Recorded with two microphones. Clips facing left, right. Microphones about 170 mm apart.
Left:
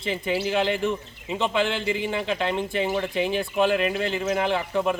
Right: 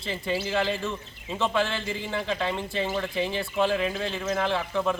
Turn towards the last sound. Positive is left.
turn(degrees=15)  # may be behind; listen again after turning